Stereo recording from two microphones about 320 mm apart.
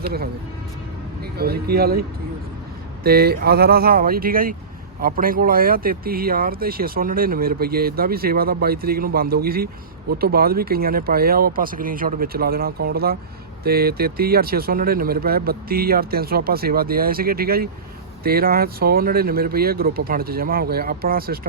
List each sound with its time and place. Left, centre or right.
0.0 s speech: right
1.4 s speech: right